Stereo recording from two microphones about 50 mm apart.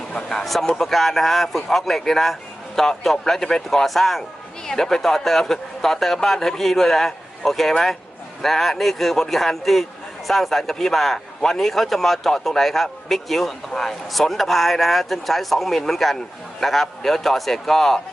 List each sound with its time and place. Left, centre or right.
0.1 s speech: centre
0.4 s a man's voice: centre